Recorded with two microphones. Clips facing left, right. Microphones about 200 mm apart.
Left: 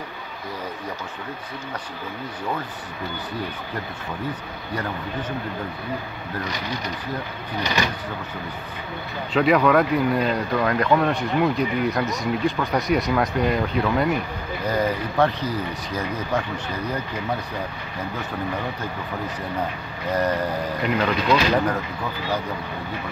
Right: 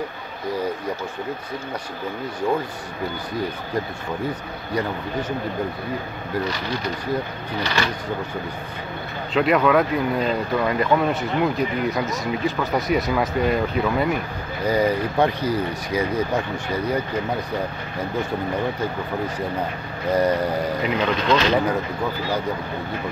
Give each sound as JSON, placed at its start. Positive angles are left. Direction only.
{"t": 7.6, "sound": "speech", "side_deg": 15}
{"t": 9.3, "sound": "speech", "side_deg": 0}
{"t": 14.7, "sound": "speech", "side_deg": -15}
{"t": 20.8, "sound": "speech", "side_deg": 5}